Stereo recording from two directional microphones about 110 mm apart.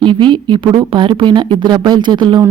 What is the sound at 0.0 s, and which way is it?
Speech, 45° right (ahead or behind).